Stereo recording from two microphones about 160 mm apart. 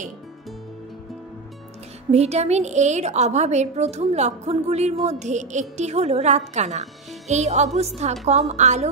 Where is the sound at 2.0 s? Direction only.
40° right (ahead or behind).